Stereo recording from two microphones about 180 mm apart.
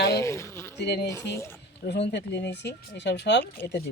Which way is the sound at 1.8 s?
70° left (ahead or behind).